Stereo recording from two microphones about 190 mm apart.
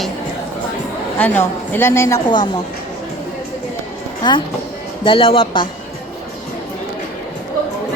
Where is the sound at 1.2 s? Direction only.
10° left (ahead or behind).